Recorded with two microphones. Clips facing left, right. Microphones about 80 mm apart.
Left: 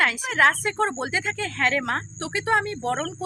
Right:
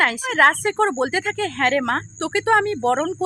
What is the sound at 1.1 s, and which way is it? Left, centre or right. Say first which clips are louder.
A woman's voice: right 5 dB; right.